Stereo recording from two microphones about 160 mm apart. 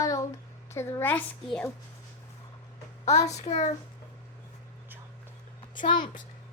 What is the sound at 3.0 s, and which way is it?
Speech, 45° left (ahead or behind).